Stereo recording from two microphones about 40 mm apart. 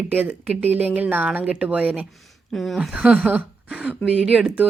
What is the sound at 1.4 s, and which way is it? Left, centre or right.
Speech, right.